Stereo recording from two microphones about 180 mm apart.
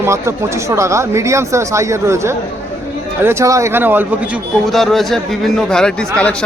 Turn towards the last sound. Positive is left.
turn(degrees=5)  # may be behind; listen again after turning